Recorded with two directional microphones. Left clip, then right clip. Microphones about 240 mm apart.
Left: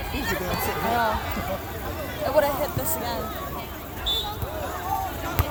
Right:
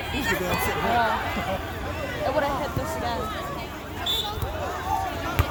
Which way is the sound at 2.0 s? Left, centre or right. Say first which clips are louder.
Left 3 dB; left.